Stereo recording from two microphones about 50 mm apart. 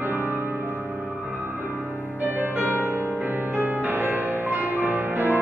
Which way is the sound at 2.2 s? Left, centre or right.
Right.